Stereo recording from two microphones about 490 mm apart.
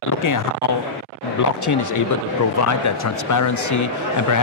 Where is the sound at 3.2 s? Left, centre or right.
Left.